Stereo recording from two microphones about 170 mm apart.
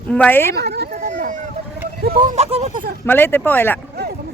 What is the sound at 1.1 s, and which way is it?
Speech, 45° right (ahead or behind).